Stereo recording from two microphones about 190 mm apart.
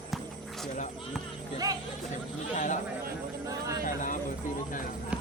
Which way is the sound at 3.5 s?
15° right (ahead or behind).